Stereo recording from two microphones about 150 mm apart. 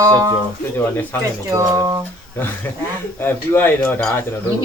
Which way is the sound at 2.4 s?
15° left (ahead or behind).